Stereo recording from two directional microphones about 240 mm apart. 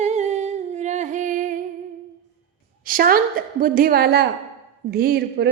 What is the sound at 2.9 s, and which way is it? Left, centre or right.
A woman's voice, right.